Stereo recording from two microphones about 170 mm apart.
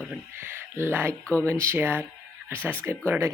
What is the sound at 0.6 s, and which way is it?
Speech, 15° right (ahead or behind).